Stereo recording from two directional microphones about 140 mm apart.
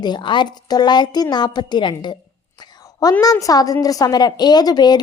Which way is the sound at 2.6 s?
30° left (ahead or behind).